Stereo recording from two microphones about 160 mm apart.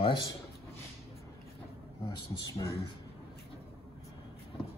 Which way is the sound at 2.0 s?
20° left (ahead or behind).